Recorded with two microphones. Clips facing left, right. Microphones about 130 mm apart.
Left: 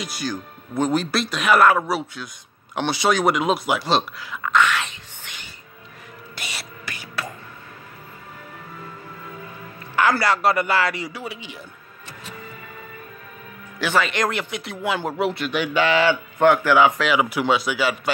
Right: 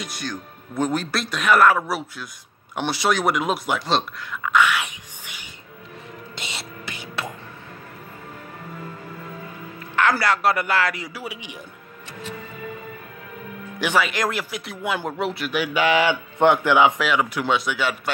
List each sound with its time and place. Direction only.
0.0 s speech: 5° left (ahead or behind)
4.5 s whispering: 10° right (ahead or behind)
6.3 s music: 25° right (ahead or behind)
10.1 s speech: centre (ahead or behind)
13.7 s a man's voice: 15° right (ahead or behind)
17.0 s speech: 5° left (ahead or behind)